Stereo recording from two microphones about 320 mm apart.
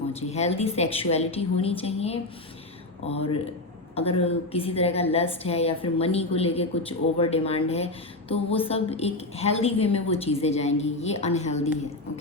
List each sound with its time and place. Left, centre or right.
0.1 s a woman's voice: centre